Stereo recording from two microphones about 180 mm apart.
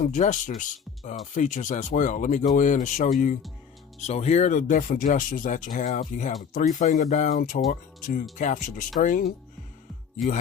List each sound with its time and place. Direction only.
0.0 s speech: 45° left (ahead or behind)